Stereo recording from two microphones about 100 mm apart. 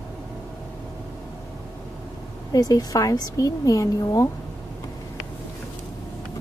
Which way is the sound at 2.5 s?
40° left (ahead or behind).